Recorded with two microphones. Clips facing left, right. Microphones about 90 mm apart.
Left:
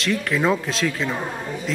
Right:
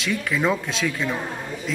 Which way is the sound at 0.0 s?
Centre (ahead or behind).